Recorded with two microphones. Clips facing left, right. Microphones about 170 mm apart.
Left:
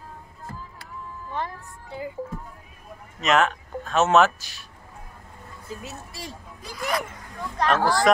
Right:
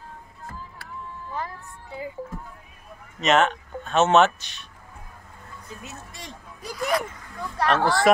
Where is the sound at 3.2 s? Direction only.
Centre (ahead or behind).